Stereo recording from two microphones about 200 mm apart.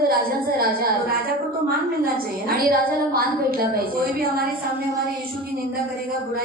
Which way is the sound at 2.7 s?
45° right (ahead or behind).